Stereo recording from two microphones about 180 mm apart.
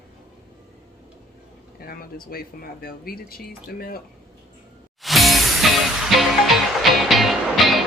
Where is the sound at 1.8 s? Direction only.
55° left (ahead or behind).